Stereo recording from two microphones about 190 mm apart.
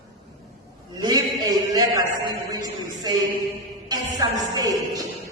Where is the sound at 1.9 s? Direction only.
20° right (ahead or behind).